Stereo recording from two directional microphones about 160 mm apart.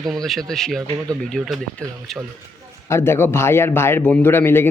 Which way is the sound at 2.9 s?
15° left (ahead or behind).